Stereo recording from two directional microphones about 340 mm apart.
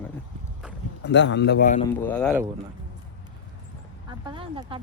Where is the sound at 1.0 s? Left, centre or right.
Left.